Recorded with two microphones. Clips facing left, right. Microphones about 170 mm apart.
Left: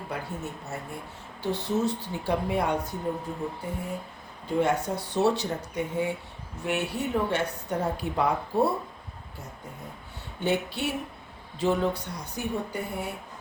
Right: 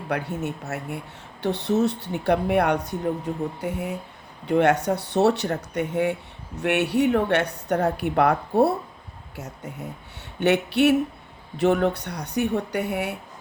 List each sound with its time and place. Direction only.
0.1 s speech: 70° right (ahead or behind)
3.6 s speech: 75° right (ahead or behind)